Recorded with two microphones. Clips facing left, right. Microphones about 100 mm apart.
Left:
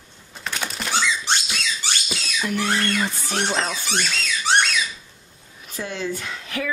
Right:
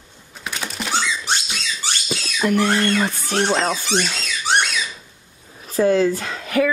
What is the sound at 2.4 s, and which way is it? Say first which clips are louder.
Speech: right 6 dB; 55° right (ahead or behind).